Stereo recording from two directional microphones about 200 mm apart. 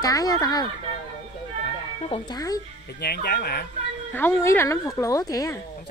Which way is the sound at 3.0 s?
55° left (ahead or behind).